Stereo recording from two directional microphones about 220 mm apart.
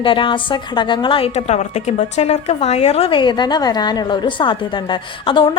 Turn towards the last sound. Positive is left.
turn(degrees=20)  # may be behind; listen again after turning